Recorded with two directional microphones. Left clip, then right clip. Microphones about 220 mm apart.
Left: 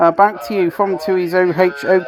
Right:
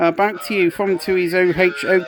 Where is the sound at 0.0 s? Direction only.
15° right (ahead or behind).